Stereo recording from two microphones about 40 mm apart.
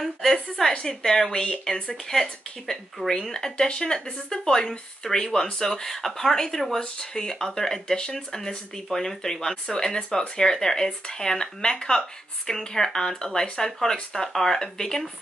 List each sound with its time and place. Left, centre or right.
0.0 s a woman's voice: centre
3.1 s speech: centre